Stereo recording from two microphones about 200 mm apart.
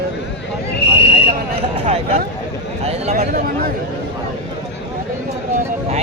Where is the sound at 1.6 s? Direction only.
30° right (ahead or behind).